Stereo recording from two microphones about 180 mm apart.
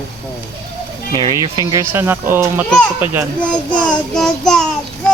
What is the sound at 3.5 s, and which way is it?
Child singing, 5° left (ahead or behind).